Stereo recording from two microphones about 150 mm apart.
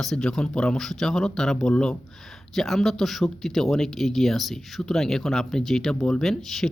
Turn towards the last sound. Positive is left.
turn(degrees=0)  # may be behind; listen again after turning